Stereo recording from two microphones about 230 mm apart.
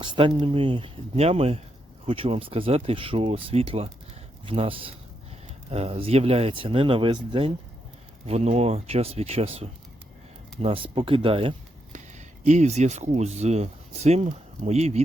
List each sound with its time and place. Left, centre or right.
0.0 s speech: right